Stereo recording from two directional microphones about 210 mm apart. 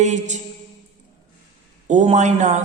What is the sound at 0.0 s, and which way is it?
Speech, 35° right (ahead or behind).